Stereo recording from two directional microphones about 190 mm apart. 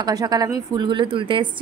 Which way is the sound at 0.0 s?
20° right (ahead or behind).